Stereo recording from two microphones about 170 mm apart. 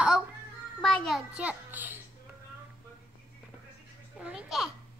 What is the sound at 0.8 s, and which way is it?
A child's voice, centre (ahead or behind).